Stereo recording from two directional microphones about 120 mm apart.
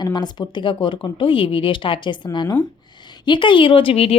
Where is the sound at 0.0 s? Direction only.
35° left (ahead or behind).